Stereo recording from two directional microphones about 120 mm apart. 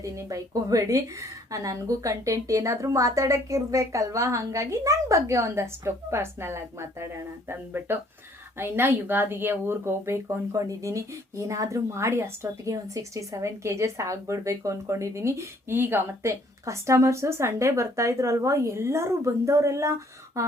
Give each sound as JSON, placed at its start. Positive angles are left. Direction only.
{"t": 0.0, "sound": "speech", "side_deg": -25}